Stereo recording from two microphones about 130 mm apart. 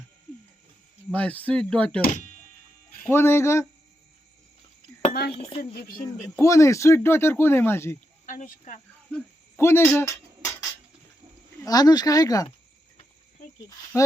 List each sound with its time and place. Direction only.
1.1 s speech: 10° left (ahead or behind)
3.0 s speech: 20° left (ahead or behind)
5.0 s speech: 45° left (ahead or behind)
6.0 s speech: 25° left (ahead or behind)
8.3 s speech: 80° left
9.1 s a sound: 20° left (ahead or behind)
11.6 s speech: 30° left (ahead or behind)
13.9 s speech: 25° left (ahead or behind)